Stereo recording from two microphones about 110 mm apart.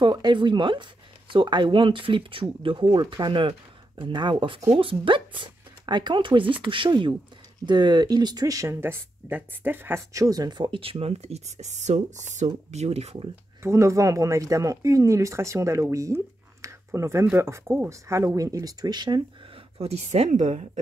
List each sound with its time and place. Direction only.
0.0 s speech: 40° right (ahead or behind)
9.3 s speech: 15° right (ahead or behind); by 10.7 s 35° right (ahead or behind)
10.7 s speech: 55° right (ahead or behind); by 12.4 s 90° right
12.7 s speech: 75° right (ahead or behind)
13.6 s speech: 25° right (ahead or behind)
19.8 s speech: 80° right